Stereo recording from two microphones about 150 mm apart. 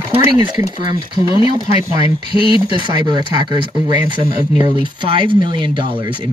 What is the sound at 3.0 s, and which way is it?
Speech, 30° right (ahead or behind).